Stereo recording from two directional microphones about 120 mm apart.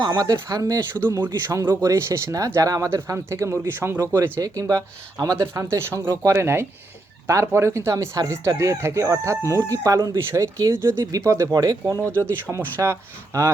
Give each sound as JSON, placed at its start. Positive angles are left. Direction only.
{"t": 0.0, "sound": "speech", "side_deg": -30}
{"t": 4.4, "sound": "speech", "side_deg": -30}